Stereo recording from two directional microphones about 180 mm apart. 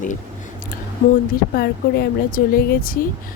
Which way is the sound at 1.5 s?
60° left (ahead or behind).